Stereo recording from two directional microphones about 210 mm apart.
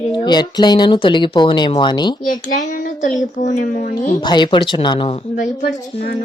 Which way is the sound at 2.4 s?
35° left (ahead or behind).